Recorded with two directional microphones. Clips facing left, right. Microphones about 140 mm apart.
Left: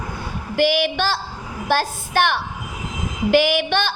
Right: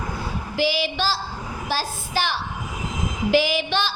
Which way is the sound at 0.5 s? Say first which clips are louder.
Left 5 dB; 60° left (ahead or behind).